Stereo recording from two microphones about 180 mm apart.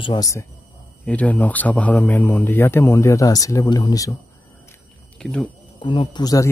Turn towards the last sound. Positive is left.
turn(degrees=20)  # may be behind; listen again after turning